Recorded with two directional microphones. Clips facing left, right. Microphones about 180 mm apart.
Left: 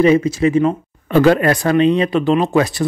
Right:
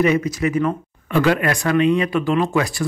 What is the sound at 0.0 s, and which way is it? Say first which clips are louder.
Speech: left 5 dB; 30° left (ahead or behind).